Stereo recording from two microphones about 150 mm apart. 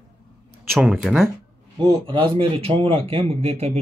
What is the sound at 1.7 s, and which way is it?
Speech, 35° right (ahead or behind).